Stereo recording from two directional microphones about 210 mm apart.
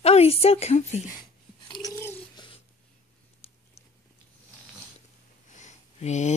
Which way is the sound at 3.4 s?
30° left (ahead or behind).